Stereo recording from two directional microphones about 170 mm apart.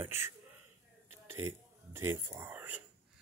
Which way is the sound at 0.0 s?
15° right (ahead or behind).